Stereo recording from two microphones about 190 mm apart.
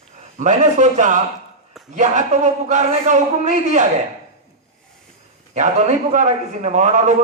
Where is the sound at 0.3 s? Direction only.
40° right (ahead or behind).